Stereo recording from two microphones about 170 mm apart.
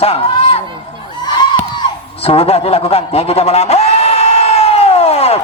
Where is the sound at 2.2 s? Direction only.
35° left (ahead or behind).